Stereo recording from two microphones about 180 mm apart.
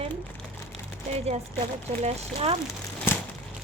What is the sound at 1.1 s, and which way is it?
Speech, 35° right (ahead or behind).